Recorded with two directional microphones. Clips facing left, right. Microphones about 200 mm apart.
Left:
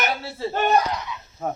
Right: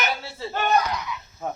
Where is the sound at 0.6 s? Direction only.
30° left (ahead or behind).